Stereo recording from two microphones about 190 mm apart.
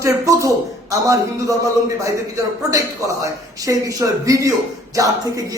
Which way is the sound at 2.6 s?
15° right (ahead or behind).